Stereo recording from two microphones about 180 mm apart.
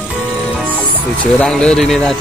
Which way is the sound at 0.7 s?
5° left (ahead or behind).